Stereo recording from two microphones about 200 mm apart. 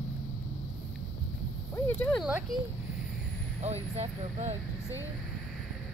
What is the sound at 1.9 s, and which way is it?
Speech, 10° left (ahead or behind).